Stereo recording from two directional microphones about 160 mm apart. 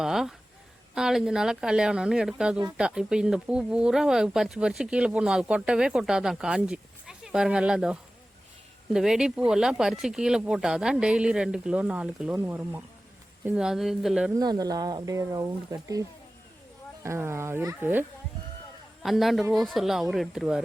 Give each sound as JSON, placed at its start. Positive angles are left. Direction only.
{"t": 0.0, "sound": "speech", "side_deg": 0}
{"t": 14.3, "sound": "speech", "side_deg": -25}
{"t": 19.0, "sound": "speech", "side_deg": 0}